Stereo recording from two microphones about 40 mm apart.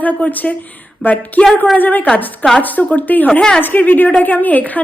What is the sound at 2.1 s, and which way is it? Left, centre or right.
Speech, left.